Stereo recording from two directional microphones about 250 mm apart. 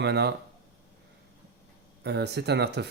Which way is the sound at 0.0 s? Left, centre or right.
Right.